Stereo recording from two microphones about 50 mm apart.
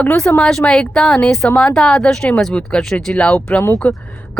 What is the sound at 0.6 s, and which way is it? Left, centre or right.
A woman's voice, centre.